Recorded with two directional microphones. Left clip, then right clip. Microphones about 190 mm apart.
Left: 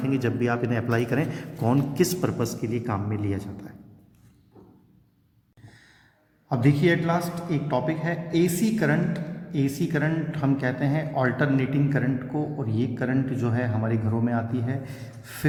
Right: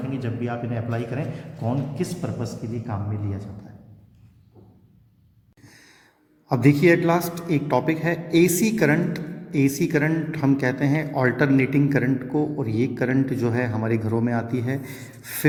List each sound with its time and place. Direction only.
0.1 s a man's voice: 35° left (ahead or behind)
6.5 s a man's voice: 30° right (ahead or behind)